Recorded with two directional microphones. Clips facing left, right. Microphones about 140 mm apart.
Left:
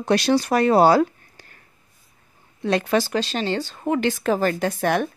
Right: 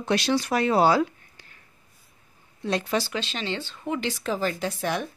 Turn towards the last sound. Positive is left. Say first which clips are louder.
# left 6 dB
turn(degrees=55)  # may be behind; listen again after turning